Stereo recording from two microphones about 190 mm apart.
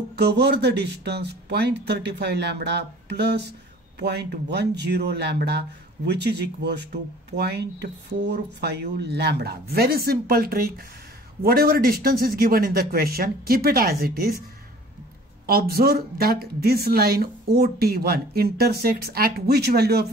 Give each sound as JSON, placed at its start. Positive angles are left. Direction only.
{"t": 0.1, "sound": "speech", "side_deg": -60}
{"t": 15.4, "sound": "speech", "side_deg": -55}